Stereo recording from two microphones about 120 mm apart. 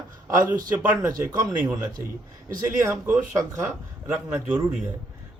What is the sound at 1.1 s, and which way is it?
Speech, 30° right (ahead or behind).